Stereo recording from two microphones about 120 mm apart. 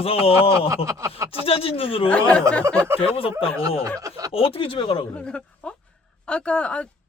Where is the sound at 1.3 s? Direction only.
50° left (ahead or behind).